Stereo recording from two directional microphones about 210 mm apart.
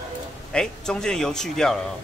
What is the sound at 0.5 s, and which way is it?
Speech, 5° left (ahead or behind).